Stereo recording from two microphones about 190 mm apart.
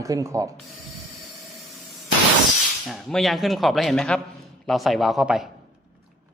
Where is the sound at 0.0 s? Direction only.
15° right (ahead or behind).